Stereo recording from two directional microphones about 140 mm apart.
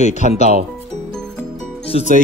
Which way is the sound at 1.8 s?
45° left (ahead or behind).